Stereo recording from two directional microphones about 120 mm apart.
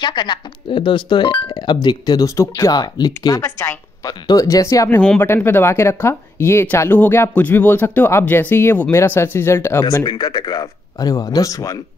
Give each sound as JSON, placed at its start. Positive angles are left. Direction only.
{"t": 0.0, "sound": "speech", "side_deg": 40}
{"t": 4.8, "sound": "speech", "side_deg": 10}
{"t": 9.8, "sound": "speech", "side_deg": 35}